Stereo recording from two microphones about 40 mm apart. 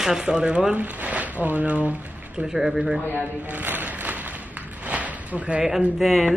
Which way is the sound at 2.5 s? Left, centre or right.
Centre.